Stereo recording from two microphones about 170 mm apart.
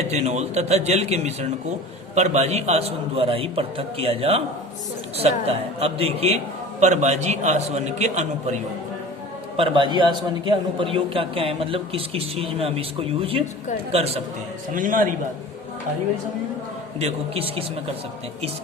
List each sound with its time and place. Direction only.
0.0 s a man's voice: 40° right (ahead or behind)
9.6 s a man's voice: 30° right (ahead or behind)
14.7 s a man's voice: 50° right (ahead or behind)
17.0 s a man's voice: 35° right (ahead or behind)